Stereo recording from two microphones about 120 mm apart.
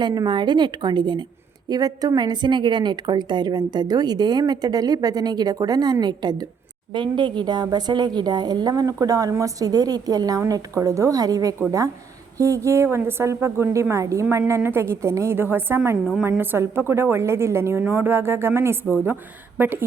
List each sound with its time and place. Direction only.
0.0 s a woman's voice: 35° right (ahead or behind); by 19.8 s 15° right (ahead or behind)